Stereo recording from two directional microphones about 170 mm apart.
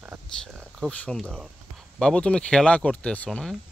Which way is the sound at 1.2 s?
10° right (ahead or behind).